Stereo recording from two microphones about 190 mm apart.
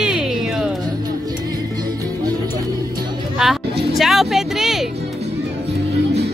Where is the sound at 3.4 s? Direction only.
Centre (ahead or behind).